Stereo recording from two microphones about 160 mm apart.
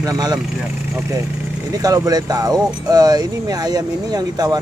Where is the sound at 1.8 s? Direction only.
20° right (ahead or behind).